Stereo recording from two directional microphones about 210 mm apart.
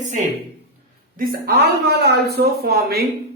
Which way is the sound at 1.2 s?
45° right (ahead or behind).